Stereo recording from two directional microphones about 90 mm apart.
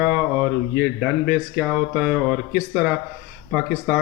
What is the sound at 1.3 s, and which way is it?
Speech, 15° right (ahead or behind).